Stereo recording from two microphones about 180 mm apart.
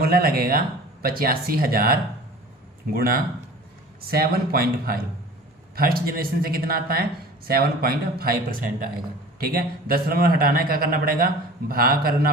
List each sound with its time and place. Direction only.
0.0 s a man's voice: 55° right (ahead or behind)